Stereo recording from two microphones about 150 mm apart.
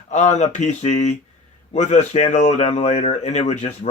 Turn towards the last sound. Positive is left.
turn(degrees=45)  # may be behind; listen again after turning